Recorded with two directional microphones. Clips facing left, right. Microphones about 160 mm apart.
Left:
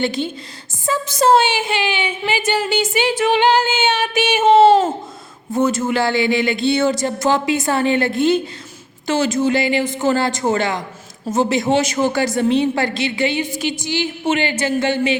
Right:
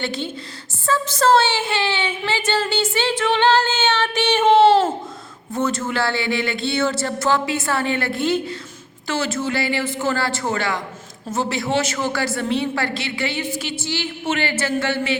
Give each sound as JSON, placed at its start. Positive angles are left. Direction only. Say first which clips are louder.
{"t": 0.0, "sound": "a woman's voice", "louder": "left 5 dB", "side_deg": 15}